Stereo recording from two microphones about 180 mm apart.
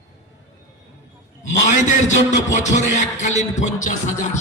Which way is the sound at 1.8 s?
40° left (ahead or behind).